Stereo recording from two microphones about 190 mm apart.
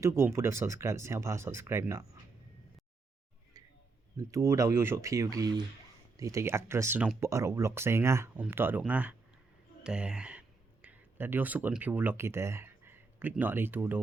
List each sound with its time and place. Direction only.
0.0 s speech: 15° right (ahead or behind)
4.2 s speech: 15° right (ahead or behind)